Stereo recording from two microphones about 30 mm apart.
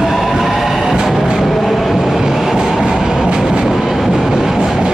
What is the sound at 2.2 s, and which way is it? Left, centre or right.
Train, centre.